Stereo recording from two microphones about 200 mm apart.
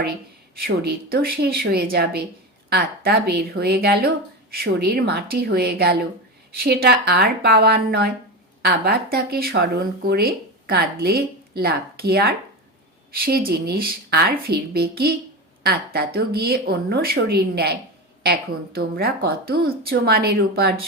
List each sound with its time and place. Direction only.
0.6 s speech: 50° right (ahead or behind)